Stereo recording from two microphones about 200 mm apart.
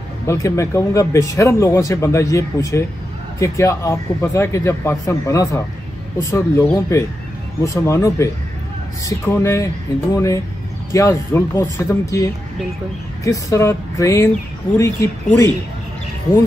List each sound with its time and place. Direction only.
0.3 s speech: 15° left (ahead or behind)